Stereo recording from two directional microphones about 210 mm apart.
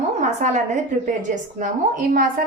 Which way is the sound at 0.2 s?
35° right (ahead or behind).